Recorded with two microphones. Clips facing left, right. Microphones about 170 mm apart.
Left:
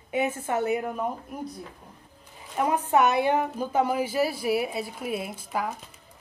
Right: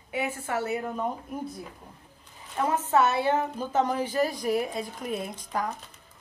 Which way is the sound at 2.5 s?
15° left (ahead or behind).